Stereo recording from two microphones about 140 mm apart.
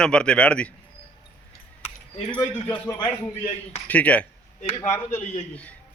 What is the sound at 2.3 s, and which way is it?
Speech, 15° left (ahead or behind).